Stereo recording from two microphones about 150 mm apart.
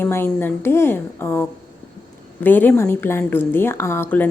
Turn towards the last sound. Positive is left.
turn(degrees=15)  # may be behind; listen again after turning